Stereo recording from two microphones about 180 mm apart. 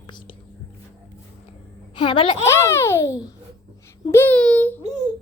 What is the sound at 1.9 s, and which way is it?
Speech, 25° left (ahead or behind).